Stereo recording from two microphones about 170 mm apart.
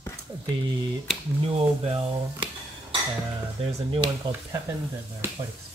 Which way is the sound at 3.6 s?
35° right (ahead or behind).